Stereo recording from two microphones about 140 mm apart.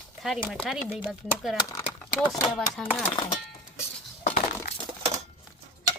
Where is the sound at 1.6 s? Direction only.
30° left (ahead or behind).